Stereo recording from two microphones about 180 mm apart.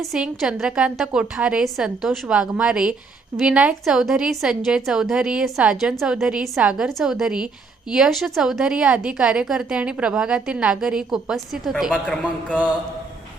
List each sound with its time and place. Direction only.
0.0 s a woman's voice: centre (ahead or behind)